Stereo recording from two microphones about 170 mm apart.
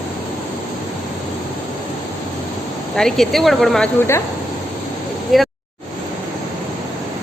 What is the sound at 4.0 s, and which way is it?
Speech, 15° left (ahead or behind).